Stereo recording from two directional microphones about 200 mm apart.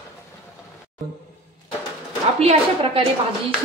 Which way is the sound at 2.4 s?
30° right (ahead or behind).